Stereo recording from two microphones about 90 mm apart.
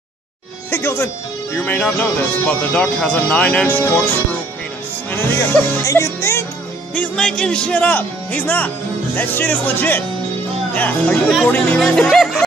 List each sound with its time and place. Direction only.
0.7 s speech: 30° left (ahead or behind)
5.1 s speech: 20° left (ahead or behind)
5.9 s music: 35° left (ahead or behind)
7.0 s speech: 10° left (ahead or behind)